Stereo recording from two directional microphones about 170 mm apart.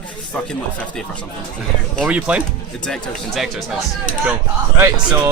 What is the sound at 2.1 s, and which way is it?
Speech, 10° right (ahead or behind).